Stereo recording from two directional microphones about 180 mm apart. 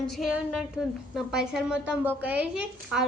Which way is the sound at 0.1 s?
Centre (ahead or behind).